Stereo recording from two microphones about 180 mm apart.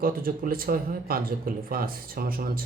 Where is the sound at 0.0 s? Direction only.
55° right (ahead or behind).